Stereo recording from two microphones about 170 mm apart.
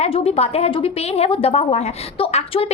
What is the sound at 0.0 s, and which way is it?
A woman's voice, 35° left (ahead or behind).